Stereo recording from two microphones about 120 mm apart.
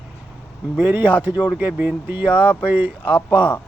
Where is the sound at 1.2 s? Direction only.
15° right (ahead or behind).